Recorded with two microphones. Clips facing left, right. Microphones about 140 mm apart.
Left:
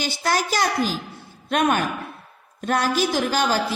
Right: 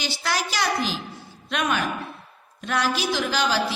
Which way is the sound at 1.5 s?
45° left (ahead or behind).